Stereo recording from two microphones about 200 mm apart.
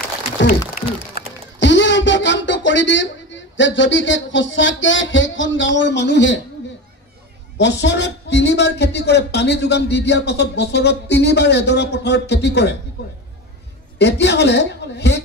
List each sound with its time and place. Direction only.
0.5 s a sound: 45° left (ahead or behind)
1.6 s speech: 65° left (ahead or behind)
7.5 s speech: 60° left (ahead or behind)
13.9 s speech: 60° left (ahead or behind)